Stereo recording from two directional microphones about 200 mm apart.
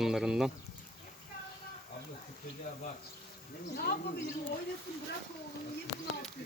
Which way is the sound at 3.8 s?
55° left (ahead or behind).